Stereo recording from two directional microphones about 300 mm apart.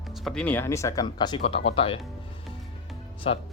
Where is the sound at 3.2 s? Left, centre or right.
Centre.